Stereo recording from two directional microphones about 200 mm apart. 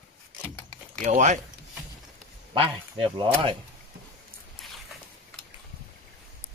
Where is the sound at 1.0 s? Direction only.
35° right (ahead or behind).